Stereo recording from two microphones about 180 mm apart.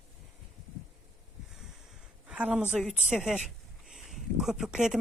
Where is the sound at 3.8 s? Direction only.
Centre (ahead or behind).